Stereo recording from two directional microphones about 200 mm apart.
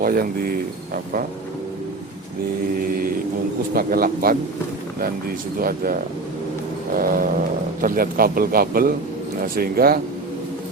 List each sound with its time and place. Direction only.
0.0 s speech: 45° right (ahead or behind)
3.8 s speech: 45° right (ahead or behind)
5.5 s speech: 45° right (ahead or behind)